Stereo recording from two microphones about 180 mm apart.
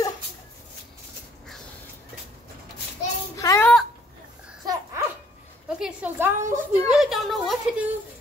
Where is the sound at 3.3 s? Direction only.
15° left (ahead or behind).